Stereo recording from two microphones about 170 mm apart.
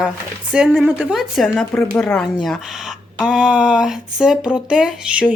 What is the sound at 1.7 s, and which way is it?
Speech, 10° left (ahead or behind).